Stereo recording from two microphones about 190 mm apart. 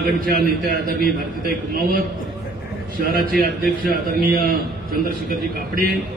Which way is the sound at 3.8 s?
50° right (ahead or behind).